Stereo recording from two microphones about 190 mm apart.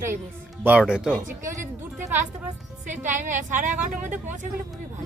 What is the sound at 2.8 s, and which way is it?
A woman's voice, 40° right (ahead or behind).